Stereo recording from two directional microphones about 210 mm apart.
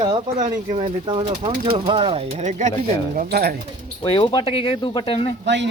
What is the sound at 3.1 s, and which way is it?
Speech, 45° right (ahead or behind).